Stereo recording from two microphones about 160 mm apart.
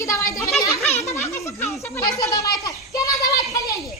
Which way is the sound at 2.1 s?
25° left (ahead or behind).